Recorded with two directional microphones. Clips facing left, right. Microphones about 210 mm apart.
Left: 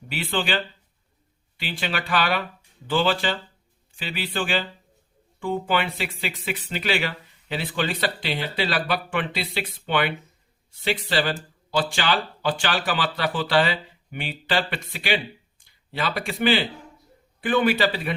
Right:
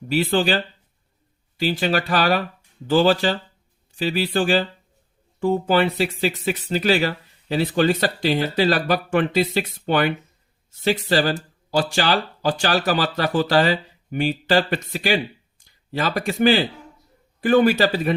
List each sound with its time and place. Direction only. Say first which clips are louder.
0.1 s speech: right 7 dB; 40° right (ahead or behind)